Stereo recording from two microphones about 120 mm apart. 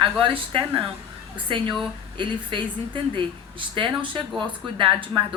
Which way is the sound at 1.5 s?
45° right (ahead or behind).